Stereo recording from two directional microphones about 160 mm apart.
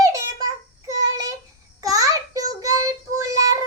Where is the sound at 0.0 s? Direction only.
20° right (ahead or behind).